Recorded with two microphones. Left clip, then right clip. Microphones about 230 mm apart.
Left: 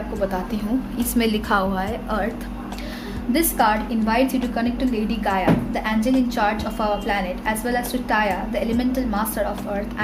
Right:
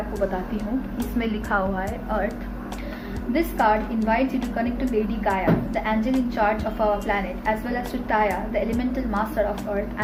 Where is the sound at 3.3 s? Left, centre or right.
Left.